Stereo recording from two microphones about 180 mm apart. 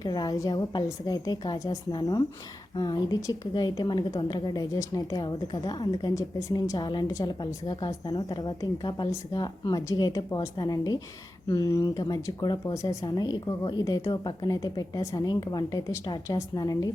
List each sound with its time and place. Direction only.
0.0 s a woman's voice: 20° left (ahead or behind)